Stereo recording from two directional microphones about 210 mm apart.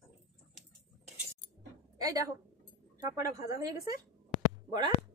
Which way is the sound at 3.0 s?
15° right (ahead or behind).